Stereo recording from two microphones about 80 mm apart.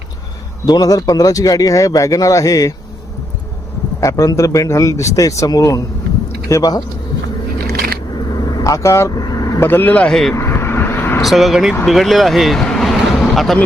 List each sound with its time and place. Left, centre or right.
0.6 s speech: left
4.0 s speech: left
8.3 s vehicle: left
9.1 s vehicle: left
9.6 s speech: left
10.3 s vehicle: left
11.2 s speech: centre